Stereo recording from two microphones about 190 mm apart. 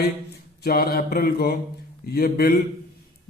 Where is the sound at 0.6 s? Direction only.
55° left (ahead or behind).